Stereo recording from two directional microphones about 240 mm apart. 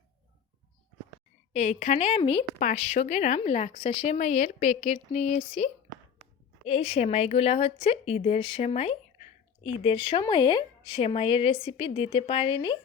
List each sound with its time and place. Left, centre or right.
1.5 s speech: left